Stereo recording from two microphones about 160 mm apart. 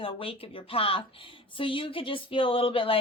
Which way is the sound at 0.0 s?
35° left (ahead or behind).